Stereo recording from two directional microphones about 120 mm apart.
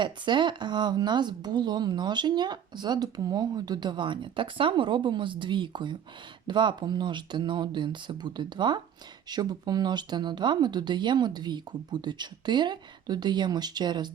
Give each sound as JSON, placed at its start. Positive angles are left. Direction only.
{"t": 0.0, "sound": "speech", "side_deg": -40}